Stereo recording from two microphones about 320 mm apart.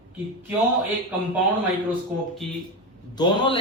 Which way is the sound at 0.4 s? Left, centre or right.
Centre.